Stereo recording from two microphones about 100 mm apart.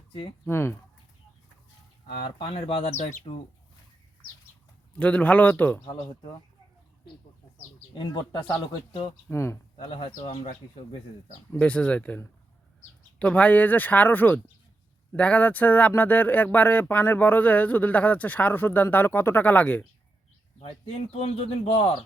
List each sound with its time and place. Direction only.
0.1 s speech: 55° left (ahead or behind)
0.4 s speech: 25° left (ahead or behind)
2.5 s speech: 70° left (ahead or behind)
4.9 s speech: 15° left (ahead or behind)
7.9 s speech: 45° left (ahead or behind)
9.3 s speech: 30° left (ahead or behind)
9.8 s speech: 60° left (ahead or behind)
11.6 s speech: 10° left (ahead or behind)
20.6 s speech: 80° left
21.8 s speech: 60° left (ahead or behind)